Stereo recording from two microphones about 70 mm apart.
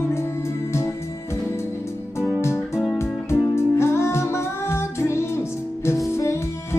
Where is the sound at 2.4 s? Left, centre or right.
Left.